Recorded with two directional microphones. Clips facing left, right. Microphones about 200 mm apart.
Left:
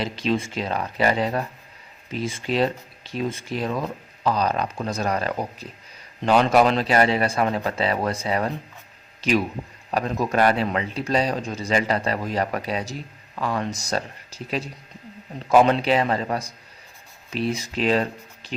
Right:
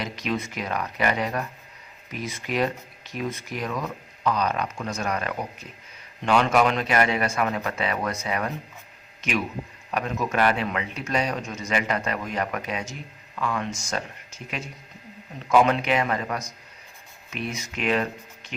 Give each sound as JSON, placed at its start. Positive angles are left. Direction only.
{"t": 0.0, "sound": "a man's voice", "side_deg": 30}